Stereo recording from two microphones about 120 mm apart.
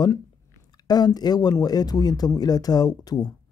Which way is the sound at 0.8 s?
35° left (ahead or behind).